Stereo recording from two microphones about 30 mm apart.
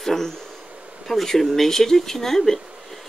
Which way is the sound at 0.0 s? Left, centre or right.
Centre.